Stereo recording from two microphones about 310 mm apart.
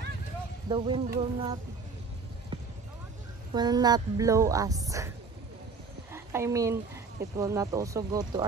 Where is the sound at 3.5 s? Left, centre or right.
Centre.